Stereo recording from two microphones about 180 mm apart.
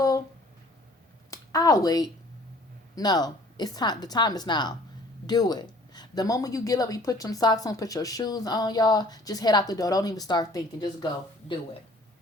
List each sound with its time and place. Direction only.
1.3 s speech: 20° left (ahead or behind)